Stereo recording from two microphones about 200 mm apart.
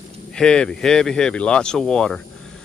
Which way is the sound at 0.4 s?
5° left (ahead or behind).